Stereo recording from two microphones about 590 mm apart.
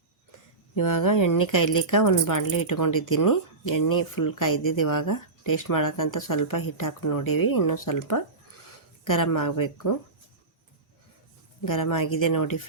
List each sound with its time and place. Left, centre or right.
0.8 s speech: left
11.6 s speech: left